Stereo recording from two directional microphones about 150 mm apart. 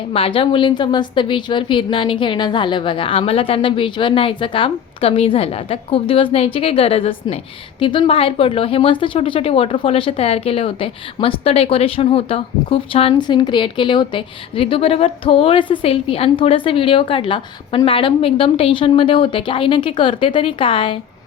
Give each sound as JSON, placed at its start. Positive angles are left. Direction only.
{"t": 0.1, "sound": "speech", "side_deg": 40}